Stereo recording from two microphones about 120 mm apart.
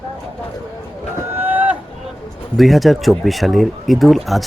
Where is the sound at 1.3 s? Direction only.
15° right (ahead or behind).